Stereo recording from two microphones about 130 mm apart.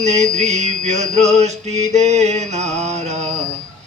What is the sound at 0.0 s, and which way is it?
Mantra, 60° right (ahead or behind).